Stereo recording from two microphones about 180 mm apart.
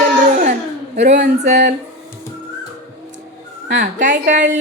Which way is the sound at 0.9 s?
40° right (ahead or behind).